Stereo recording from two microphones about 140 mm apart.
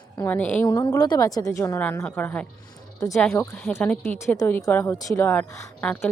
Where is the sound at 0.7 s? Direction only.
35° left (ahead or behind); by 4.2 s 5° left (ahead or behind).